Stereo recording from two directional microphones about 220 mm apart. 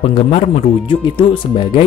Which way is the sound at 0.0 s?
30° left (ahead or behind).